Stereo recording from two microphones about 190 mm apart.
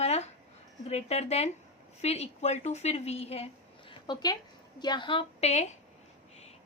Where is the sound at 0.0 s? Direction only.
35° left (ahead or behind).